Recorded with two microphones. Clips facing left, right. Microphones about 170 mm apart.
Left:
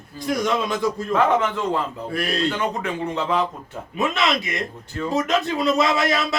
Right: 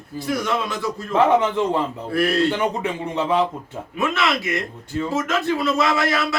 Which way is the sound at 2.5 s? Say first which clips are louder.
Right 2 dB; 25° right (ahead or behind).